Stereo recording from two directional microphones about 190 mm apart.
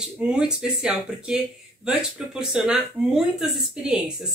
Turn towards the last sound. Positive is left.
turn(degrees=-5)  # may be behind; listen again after turning